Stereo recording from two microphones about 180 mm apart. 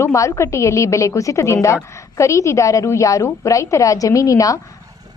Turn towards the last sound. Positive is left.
turn(degrees=20)  # may be behind; listen again after turning